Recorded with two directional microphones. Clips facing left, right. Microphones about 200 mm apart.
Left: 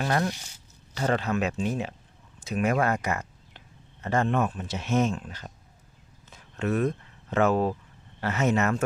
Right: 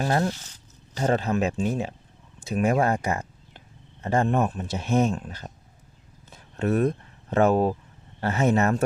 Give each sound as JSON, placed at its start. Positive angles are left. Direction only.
{"t": 0.0, "sound": "speech", "side_deg": -30}
{"t": 0.3, "sound": "speech", "side_deg": 10}
{"t": 0.9, "sound": "speech", "side_deg": -35}